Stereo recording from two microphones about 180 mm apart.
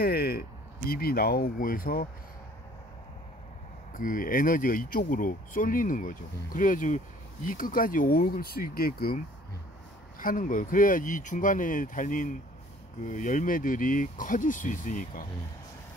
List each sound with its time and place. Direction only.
0.0 s speech: 60° left (ahead or behind)
3.9 s speech: 50° left (ahead or behind)